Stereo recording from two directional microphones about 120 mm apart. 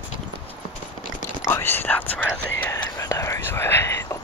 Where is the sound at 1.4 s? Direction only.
20° left (ahead or behind).